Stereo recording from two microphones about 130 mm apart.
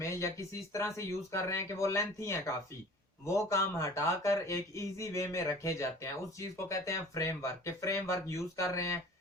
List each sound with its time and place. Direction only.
0.0 s speech: 25° left (ahead or behind)